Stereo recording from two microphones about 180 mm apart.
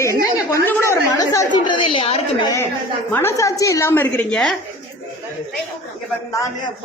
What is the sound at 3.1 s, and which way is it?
A woman's voice, 15° left (ahead or behind).